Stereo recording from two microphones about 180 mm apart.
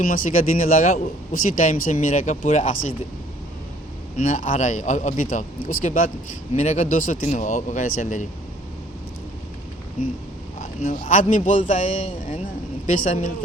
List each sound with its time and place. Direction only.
0.1 s a man's voice: 50° left (ahead or behind)
4.2 s a man's voice: 45° left (ahead or behind)
10.8 s a man's voice: 45° left (ahead or behind)